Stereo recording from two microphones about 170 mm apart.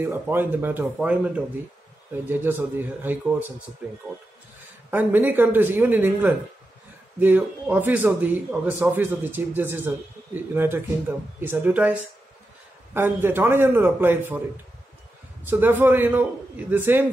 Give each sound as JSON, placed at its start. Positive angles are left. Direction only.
{"t": 0.0, "sound": "speech", "side_deg": -10}
{"t": 15.4, "sound": "speech", "side_deg": -10}